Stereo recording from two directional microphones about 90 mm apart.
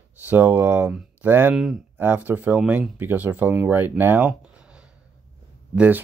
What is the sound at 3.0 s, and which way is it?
Speech, 20° right (ahead or behind).